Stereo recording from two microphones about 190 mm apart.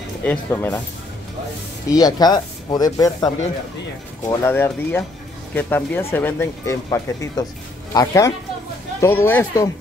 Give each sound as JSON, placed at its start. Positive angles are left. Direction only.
{"t": 0.2, "sound": "speech", "side_deg": 10}
{"t": 1.9, "sound": "speech", "side_deg": 20}